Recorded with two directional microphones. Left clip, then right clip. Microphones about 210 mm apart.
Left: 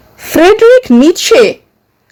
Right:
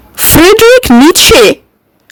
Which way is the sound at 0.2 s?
55° right (ahead or behind).